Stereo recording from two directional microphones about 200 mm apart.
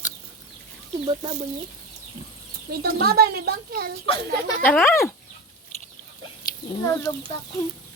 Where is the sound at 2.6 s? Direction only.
50° right (ahead or behind).